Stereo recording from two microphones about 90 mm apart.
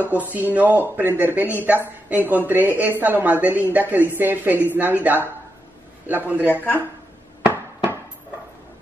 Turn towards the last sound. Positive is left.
turn(degrees=-15)  # may be behind; listen again after turning